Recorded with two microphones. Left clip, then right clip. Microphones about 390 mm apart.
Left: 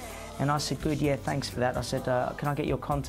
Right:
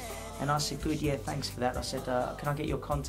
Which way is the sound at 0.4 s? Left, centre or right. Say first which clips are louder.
Left 2 dB; left.